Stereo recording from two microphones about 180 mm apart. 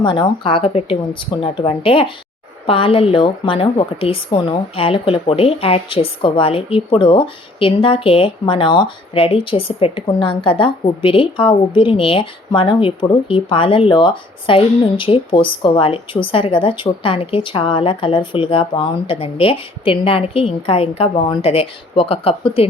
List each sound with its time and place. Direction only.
0.0 s a woman's voice: 25° left (ahead or behind)